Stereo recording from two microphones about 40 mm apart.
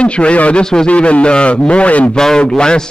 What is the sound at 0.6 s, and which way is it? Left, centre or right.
Speech, centre.